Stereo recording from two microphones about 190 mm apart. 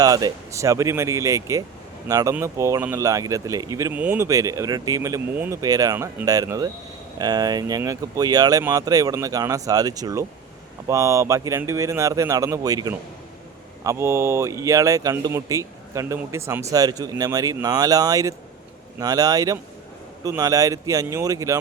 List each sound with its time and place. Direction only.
0.0 s speech: 20° right (ahead or behind)